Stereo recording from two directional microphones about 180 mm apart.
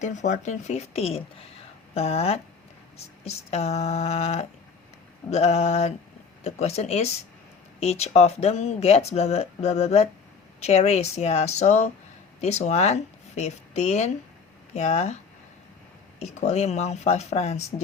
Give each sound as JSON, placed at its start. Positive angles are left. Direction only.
{"t": 0.0, "sound": "speech", "side_deg": 40}
{"t": 16.2, "sound": "speech", "side_deg": 40}